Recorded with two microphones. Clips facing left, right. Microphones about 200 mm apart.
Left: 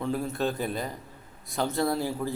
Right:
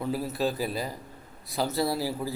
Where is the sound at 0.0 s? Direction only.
5° right (ahead or behind).